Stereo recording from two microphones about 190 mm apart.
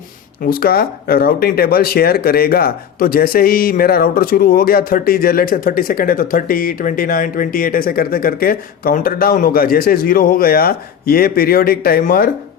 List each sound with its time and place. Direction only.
0.4 s speech: 50° left (ahead or behind)